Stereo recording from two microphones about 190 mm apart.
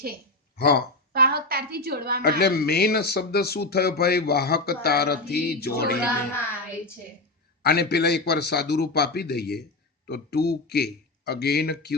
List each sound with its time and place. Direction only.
0.5 s speech: 55° left (ahead or behind)
1.1 s a sound: 55° right (ahead or behind)
2.4 s speech: 55° left (ahead or behind)
7.6 s speech: 55° left (ahead or behind)